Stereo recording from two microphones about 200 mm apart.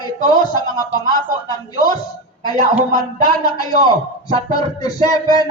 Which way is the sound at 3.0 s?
20° left (ahead or behind).